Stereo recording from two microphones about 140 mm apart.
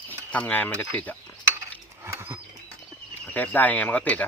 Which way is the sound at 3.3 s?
10° left (ahead or behind).